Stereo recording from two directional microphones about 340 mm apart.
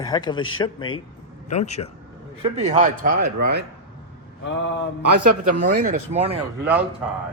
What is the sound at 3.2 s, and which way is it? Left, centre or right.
Speech, right.